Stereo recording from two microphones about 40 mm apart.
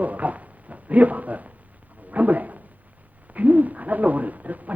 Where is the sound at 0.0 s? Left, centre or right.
Right.